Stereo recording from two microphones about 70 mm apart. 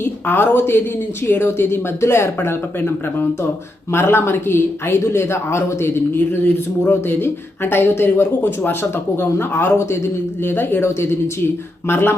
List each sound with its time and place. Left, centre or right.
0.0 s a woman's voice: left